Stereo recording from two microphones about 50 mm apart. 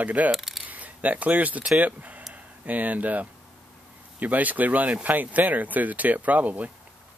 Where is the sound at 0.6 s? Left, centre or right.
Right.